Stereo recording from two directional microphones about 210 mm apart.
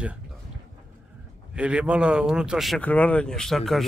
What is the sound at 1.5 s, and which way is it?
Speech, 5° right (ahead or behind).